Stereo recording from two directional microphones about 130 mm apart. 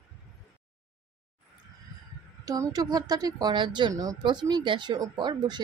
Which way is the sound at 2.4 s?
30° right (ahead or behind).